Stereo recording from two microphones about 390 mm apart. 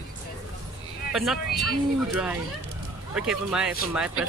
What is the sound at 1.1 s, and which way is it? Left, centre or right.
Speech, centre.